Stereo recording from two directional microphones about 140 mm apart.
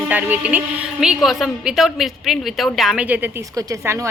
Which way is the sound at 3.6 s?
25° right (ahead or behind).